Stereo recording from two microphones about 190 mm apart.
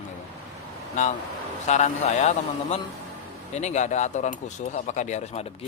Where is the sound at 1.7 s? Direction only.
40° left (ahead or behind).